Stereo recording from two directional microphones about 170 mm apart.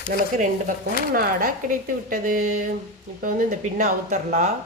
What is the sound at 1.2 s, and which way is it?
A woman's voice, 60° right (ahead or behind).